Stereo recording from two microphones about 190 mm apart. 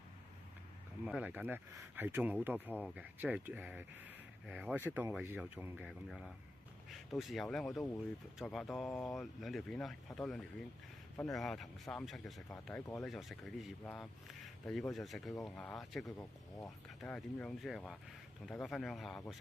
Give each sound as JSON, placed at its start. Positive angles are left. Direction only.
{"t": 1.0, "sound": "speech", "side_deg": -5}
{"t": 16.1, "sound": "speech", "side_deg": 15}
{"t": 17.0, "sound": "speech", "side_deg": 5}